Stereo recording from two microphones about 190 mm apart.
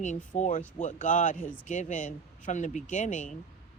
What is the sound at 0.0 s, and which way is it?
Speech, 40° left (ahead or behind).